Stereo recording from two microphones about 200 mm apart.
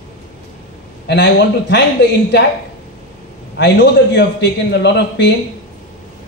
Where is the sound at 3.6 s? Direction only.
60° left (ahead or behind).